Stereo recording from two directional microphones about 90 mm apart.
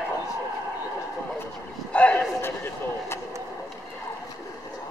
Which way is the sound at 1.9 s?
15° left (ahead or behind).